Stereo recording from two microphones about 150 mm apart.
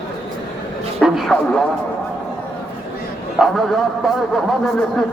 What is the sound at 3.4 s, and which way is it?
Speech, centre (ahead or behind).